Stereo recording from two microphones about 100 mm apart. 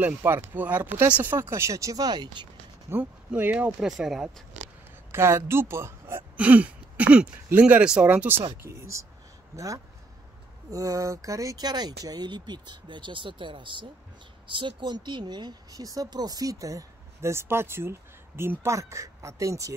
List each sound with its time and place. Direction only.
0.0 s speech: 20° right (ahead or behind); by 2.4 s 45° right (ahead or behind)
2.9 s speech: 25° right (ahead or behind)
3.8 s speech: 5° right (ahead or behind)
5.1 s speech: 25° right (ahead or behind)
6.3 s speech: 15° right (ahead or behind)
10.7 s speech: 35° right (ahead or behind)